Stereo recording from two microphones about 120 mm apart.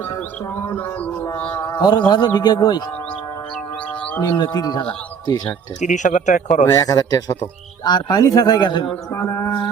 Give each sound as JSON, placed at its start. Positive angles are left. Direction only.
{"t": 0.1, "sound": "music", "side_deg": 20}
{"t": 1.7, "sound": "a man's voice", "side_deg": 35}
{"t": 4.2, "sound": "a man's voice", "side_deg": 35}
{"t": 5.8, "sound": "speech", "side_deg": 90}
{"t": 6.7, "sound": "a man's voice", "side_deg": 30}
{"t": 9.1, "sound": "music", "side_deg": 25}